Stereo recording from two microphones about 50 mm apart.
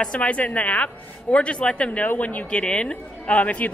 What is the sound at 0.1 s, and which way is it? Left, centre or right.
A woman's voice, left.